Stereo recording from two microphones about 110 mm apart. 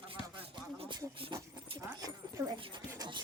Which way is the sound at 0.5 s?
45° right (ahead or behind).